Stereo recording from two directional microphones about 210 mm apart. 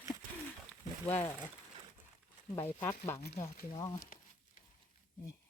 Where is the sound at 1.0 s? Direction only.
10° left (ahead or behind).